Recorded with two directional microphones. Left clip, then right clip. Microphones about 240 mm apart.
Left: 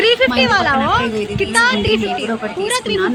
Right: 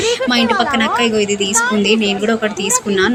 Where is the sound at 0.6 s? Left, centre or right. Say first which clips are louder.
Even; centre.